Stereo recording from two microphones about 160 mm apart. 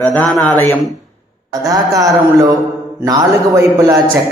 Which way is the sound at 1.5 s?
20° right (ahead or behind).